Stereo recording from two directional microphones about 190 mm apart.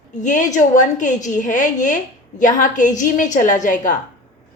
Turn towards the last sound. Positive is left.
turn(degrees=40)  # may be behind; listen again after turning